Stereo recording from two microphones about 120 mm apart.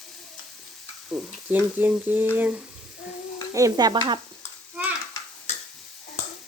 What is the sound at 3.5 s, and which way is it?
Stir, 30° right (ahead or behind).